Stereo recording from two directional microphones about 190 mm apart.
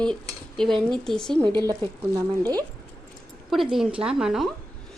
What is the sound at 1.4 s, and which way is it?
A woman's voice, 20° right (ahead or behind).